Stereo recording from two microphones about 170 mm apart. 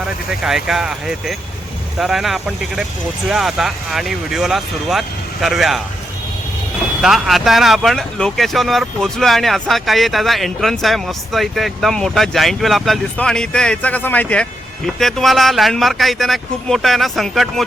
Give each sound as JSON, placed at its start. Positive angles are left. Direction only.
{"t": 0.3, "sound": "speech", "side_deg": -5}
{"t": 7.0, "sound": "speech", "side_deg": 0}